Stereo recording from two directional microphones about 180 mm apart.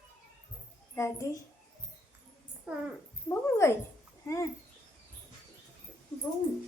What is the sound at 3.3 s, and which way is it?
Speech, 15° left (ahead or behind).